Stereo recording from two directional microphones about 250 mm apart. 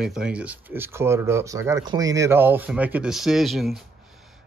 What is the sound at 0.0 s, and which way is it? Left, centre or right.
Speech, centre.